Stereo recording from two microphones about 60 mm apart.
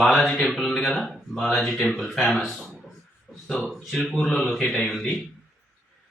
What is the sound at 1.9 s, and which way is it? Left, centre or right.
Speech, centre.